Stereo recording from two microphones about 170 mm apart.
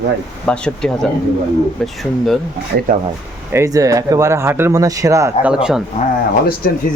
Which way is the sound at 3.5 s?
20° right (ahead or behind).